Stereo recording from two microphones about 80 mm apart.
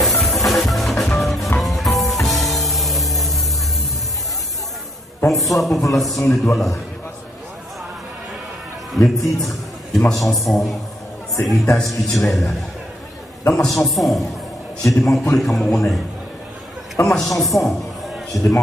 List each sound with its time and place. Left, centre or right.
0.0 s music: centre
5.3 s a man's voice: centre
8.9 s a man's voice: centre
17.0 s a man's voice: left
17.4 s a man's voice: centre
18.3 s a man's voice: left